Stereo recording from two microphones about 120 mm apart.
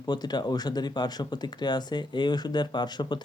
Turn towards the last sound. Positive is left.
turn(degrees=35)  # may be behind; listen again after turning